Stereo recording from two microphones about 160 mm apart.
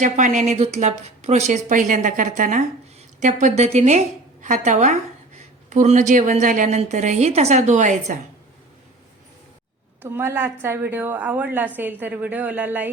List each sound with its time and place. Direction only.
0.0 s speech: 50° right (ahead or behind)
10.0 s a woman's voice: 15° right (ahead or behind)